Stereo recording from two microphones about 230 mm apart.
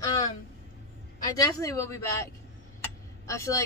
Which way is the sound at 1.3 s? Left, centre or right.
Centre.